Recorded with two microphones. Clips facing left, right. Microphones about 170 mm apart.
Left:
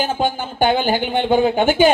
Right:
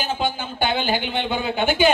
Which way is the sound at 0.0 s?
50° left (ahead or behind).